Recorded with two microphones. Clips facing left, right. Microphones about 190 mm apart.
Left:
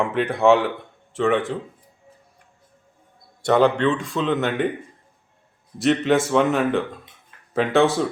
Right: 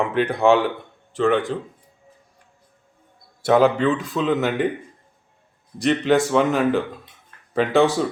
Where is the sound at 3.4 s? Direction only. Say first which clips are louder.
Right 1 dB; 5° right (ahead or behind).